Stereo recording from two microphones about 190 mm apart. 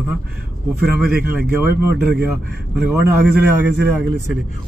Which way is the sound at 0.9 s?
10° right (ahead or behind).